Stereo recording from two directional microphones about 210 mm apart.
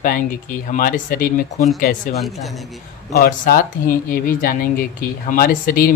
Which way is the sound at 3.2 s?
40° left (ahead or behind).